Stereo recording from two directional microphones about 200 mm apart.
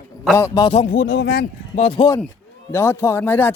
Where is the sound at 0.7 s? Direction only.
30° left (ahead or behind).